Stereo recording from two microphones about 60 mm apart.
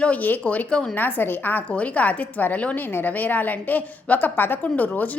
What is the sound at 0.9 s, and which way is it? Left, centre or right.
A woman's voice, left.